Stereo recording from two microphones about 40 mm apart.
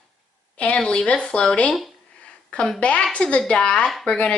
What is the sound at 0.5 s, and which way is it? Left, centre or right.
A woman's voice, left.